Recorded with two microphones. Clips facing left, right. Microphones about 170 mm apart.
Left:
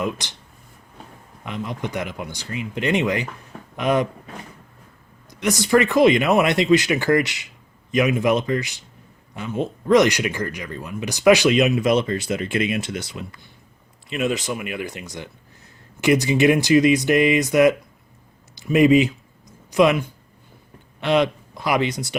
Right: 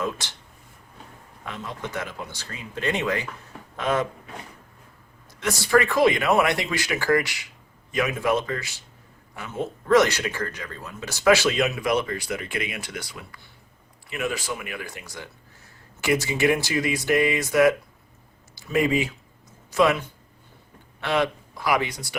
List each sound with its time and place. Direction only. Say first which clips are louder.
0.0 s speech: left 3 dB; 15° left (ahead or behind)
1.5 s speech: left 5 dB; 15° left (ahead or behind)
5.3 s speech: left 3 dB; 20° left (ahead or behind)